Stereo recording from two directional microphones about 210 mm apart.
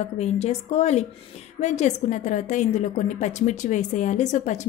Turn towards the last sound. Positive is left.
turn(degrees=35)  # may be behind; listen again after turning